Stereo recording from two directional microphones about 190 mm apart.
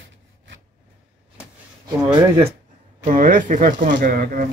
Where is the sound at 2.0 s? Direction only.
20° right (ahead or behind).